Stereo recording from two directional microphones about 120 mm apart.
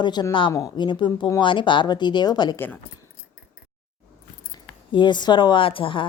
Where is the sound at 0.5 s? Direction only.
35° left (ahead or behind).